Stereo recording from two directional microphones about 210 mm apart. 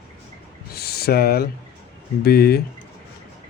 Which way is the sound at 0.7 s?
45° left (ahead or behind).